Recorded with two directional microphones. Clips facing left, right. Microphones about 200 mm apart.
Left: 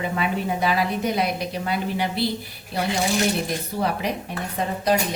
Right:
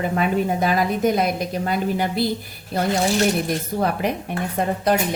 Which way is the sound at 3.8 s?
50° right (ahead or behind).